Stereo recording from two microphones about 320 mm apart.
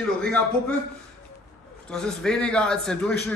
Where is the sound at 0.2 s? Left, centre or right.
Centre.